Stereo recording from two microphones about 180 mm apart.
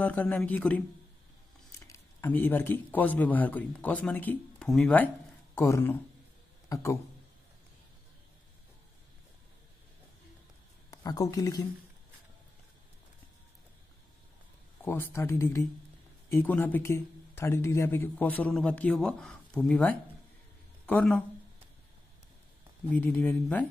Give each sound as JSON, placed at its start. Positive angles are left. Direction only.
{"t": 0.0, "sound": "speech", "side_deg": 10}
{"t": 10.9, "sound": "speech", "side_deg": 20}
{"t": 14.8, "sound": "speech", "side_deg": 10}
{"t": 22.8, "sound": "speech", "side_deg": 10}